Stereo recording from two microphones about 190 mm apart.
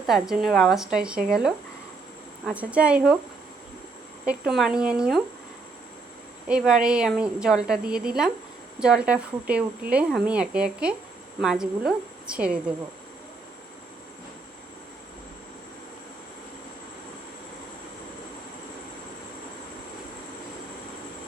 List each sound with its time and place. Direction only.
0.1 s speech: centre (ahead or behind)
4.3 s speech: centre (ahead or behind)
6.5 s speech: 5° right (ahead or behind)